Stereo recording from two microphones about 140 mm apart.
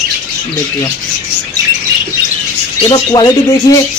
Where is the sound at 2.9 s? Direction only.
30° left (ahead or behind).